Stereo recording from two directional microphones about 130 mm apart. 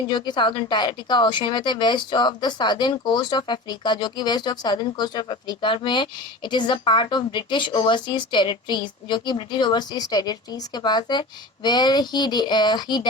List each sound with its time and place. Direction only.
0.1 s speech: 35° left (ahead or behind)